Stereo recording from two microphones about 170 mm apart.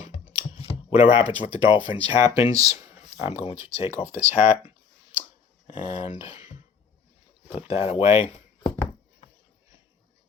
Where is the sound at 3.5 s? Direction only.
15° right (ahead or behind).